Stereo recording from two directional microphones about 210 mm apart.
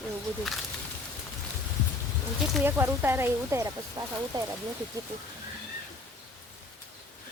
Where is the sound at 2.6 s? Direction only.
10° right (ahead or behind).